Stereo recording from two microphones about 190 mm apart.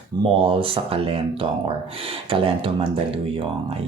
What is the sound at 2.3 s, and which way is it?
Speech, 30° right (ahead or behind).